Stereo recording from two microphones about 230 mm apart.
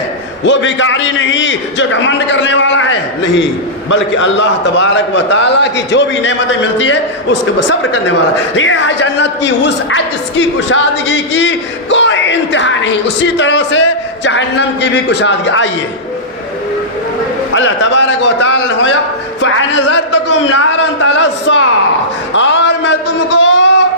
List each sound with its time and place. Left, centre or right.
0.4 s a woman's voice: left
17.5 s a woman's voice: left
19.4 s music: left
20.2 s a woman's voice: left